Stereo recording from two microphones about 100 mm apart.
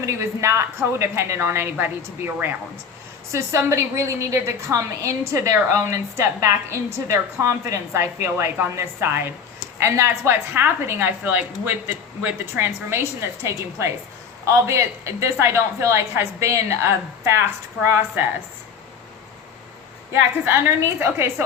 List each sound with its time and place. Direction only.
0.0 s a woman's voice: 30° right (ahead or behind)
20.4 s a woman's voice: 25° right (ahead or behind)